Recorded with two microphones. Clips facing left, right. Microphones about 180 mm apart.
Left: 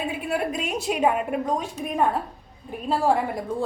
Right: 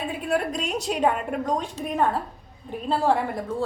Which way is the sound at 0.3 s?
5° left (ahead or behind).